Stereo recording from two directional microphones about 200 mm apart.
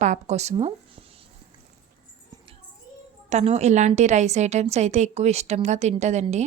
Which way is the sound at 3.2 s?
35° right (ahead or behind).